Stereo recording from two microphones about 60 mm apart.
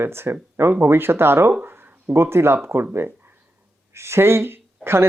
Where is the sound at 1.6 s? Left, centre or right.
Right.